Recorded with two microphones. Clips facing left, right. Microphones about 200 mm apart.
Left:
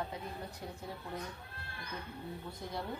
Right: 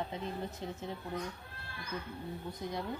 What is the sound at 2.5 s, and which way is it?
Speech, 20° right (ahead or behind).